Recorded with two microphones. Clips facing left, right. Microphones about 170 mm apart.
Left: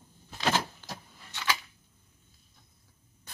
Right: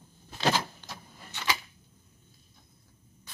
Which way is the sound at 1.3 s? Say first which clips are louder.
Even; 15° right (ahead or behind).